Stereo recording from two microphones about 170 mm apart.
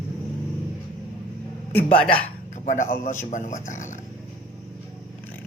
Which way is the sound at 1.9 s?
10° left (ahead or behind).